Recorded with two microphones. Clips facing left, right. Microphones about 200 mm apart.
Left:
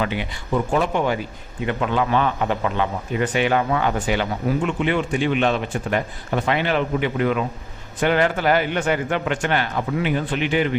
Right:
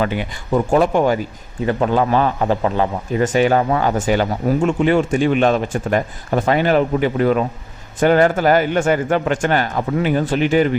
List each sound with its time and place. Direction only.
0.0 s a man's voice: 45° right (ahead or behind)